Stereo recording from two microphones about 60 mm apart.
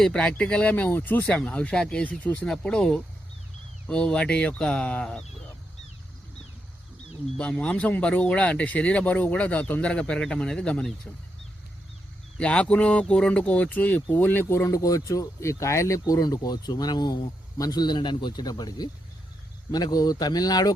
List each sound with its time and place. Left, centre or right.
0.0 s speech: centre; by 1.3 s left
1.3 s speech: centre
2.0 s speech: left
2.6 s speech: centre
7.3 s speech: centre
12.4 s speech: centre; by 14.4 s left
14.4 s speech: left
14.7 s speech: left
15.4 s speech: left
16.0 s speech: left
19.7 s speech: left